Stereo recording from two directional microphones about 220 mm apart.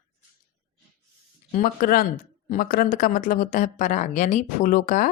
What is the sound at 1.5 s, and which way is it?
A woman's voice, 40° left (ahead or behind).